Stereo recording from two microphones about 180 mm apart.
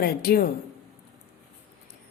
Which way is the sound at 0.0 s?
55° left (ahead or behind).